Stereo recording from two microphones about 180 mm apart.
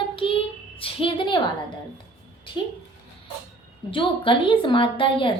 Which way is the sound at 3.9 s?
30° left (ahead or behind).